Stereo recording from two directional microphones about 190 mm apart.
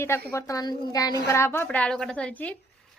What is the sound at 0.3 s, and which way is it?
A woman's voice, 15° left (ahead or behind).